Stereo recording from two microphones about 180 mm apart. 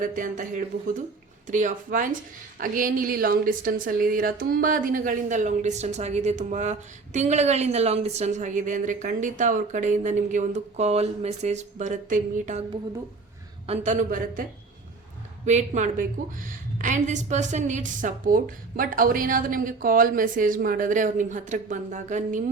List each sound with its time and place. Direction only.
0.0 s speech: 45° right (ahead or behind)
13.7 s speech: 45° right (ahead or behind)
15.4 s speech: 40° right (ahead or behind)